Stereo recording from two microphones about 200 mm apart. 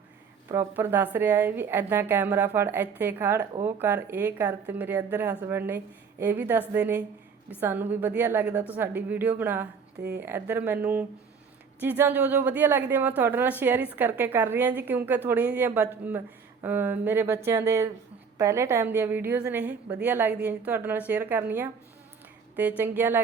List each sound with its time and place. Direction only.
0.4 s speech: 15° right (ahead or behind)
22.8 s speech: 10° right (ahead or behind)